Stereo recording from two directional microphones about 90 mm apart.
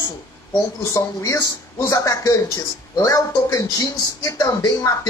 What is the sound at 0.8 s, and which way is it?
Speech, 35° left (ahead or behind).